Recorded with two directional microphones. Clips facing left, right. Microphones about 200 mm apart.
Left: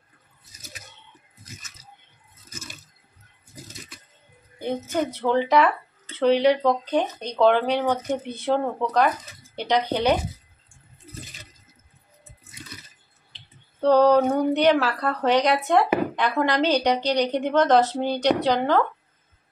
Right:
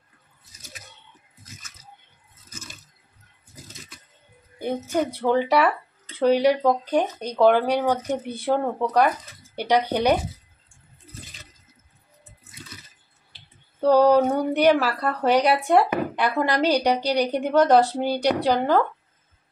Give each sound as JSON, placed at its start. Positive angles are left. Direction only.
{"t": 2.5, "sound": "a sound", "side_deg": 10}
{"t": 4.6, "sound": "speech", "side_deg": -10}
{"t": 13.3, "sound": "speech", "side_deg": -10}